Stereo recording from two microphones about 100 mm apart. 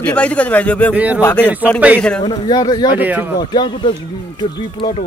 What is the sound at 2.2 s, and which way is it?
Speech, 50° left (ahead or behind).